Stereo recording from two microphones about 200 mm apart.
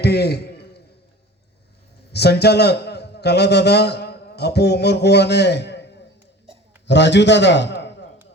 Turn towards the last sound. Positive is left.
turn(degrees=60)  # may be behind; listen again after turning